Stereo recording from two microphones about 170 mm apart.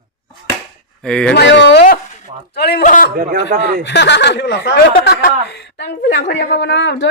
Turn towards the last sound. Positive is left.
turn(degrees=90)